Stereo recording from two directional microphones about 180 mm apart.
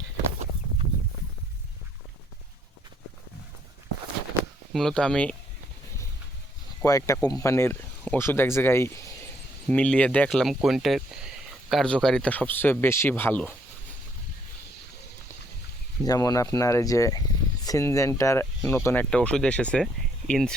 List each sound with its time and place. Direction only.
4.7 s speech: 5° left (ahead or behind)
6.8 s speech: 20° left (ahead or behind)
16.0 s speech: 20° left (ahead or behind)